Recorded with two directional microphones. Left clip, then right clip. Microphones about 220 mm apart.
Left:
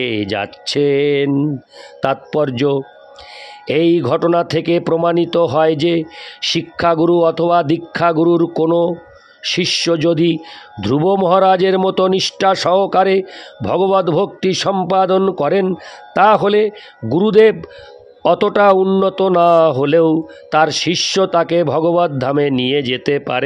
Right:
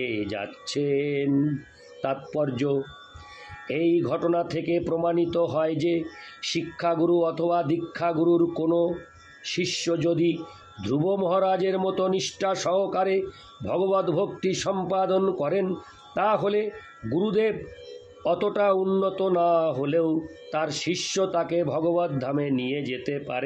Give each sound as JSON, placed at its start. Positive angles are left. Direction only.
{"t": 0.0, "sound": "a man's voice", "side_deg": 50}